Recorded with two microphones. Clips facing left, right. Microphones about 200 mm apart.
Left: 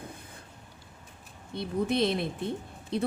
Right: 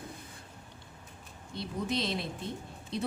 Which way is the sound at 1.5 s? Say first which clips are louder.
Left 5 dB; 55° left (ahead or behind).